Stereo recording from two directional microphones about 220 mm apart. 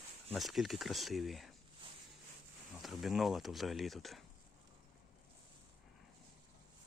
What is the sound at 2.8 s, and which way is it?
Speech, centre (ahead or behind).